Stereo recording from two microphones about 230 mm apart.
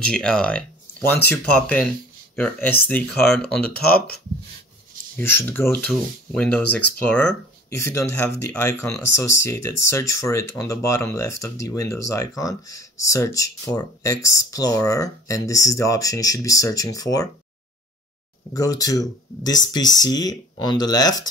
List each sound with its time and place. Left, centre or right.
0.0 s speech: centre
3.7 s speech: left
5.1 s speech: centre
18.5 s speech: centre